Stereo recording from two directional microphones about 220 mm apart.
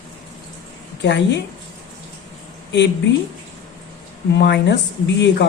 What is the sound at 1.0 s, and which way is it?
Speech, 55° left (ahead or behind).